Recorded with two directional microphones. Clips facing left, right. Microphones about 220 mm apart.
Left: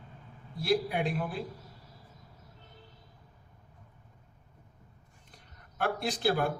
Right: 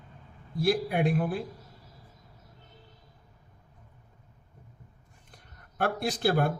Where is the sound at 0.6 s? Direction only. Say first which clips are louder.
Right 3 dB; 50° right (ahead or behind).